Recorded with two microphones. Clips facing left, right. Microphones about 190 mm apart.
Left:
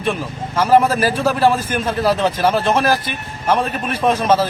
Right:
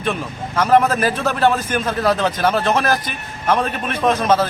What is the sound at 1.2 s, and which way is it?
A man's voice, 5° left (ahead or behind).